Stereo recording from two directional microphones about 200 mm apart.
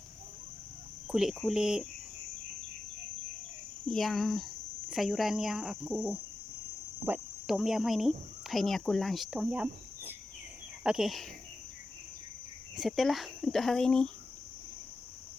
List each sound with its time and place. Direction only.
1.1 s speech: 5° right (ahead or behind)
3.8 s speech: centre (ahead or behind)
12.7 s speech: centre (ahead or behind)